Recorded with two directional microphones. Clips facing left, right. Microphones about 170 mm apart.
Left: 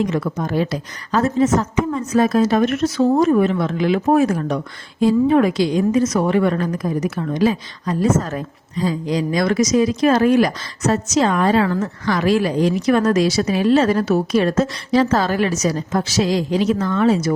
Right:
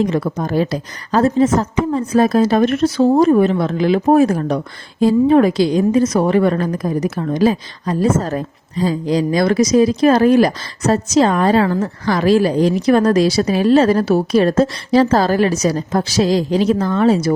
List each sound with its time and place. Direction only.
0.0 s a woman's voice: 35° right (ahead or behind)